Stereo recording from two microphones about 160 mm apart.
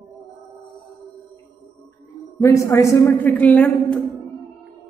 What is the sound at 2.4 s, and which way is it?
A woman's voice, 20° left (ahead or behind).